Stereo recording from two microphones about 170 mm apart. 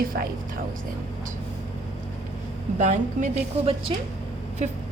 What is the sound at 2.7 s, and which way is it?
Speech, 45° right (ahead or behind).